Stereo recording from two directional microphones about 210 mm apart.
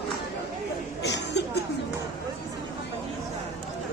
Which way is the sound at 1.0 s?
55° left (ahead or behind).